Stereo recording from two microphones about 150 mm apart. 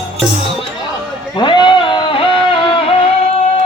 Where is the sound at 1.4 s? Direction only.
30° left (ahead or behind).